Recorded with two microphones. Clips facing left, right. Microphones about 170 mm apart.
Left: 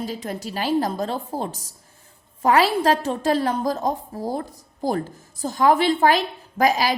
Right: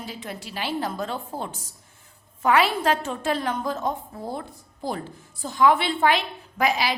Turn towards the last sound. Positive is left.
turn(degrees=40)  # may be behind; listen again after turning